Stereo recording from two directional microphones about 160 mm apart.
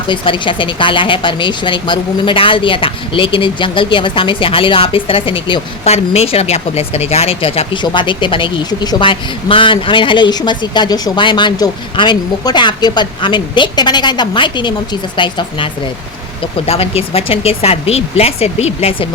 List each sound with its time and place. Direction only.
0.1 s speech: 30° left (ahead or behind)